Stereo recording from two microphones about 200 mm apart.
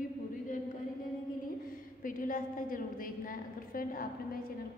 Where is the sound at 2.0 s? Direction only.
45° left (ahead or behind).